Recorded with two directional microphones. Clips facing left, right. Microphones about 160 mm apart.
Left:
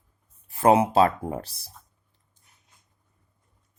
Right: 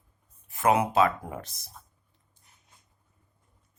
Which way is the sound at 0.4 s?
30° left (ahead or behind).